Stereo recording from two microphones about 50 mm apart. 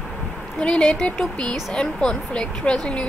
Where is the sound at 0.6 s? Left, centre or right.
Centre.